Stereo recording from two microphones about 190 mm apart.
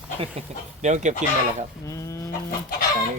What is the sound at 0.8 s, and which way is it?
Speech, 40° right (ahead or behind).